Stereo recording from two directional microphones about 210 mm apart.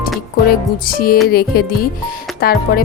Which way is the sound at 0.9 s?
45° left (ahead or behind).